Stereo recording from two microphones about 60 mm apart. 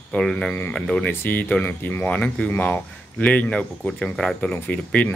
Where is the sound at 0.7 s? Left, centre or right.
Centre.